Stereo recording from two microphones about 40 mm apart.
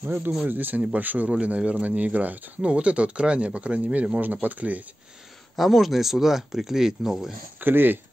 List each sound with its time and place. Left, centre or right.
0.5 s speech: right
2.6 s speech: right
4.2 s speech: right
5.6 s speech: centre
7.6 s speech: right